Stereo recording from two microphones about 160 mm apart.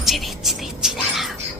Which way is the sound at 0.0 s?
Centre (ahead or behind).